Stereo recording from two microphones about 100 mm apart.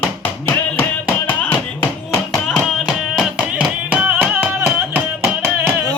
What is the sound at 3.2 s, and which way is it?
Music, 15° right (ahead or behind).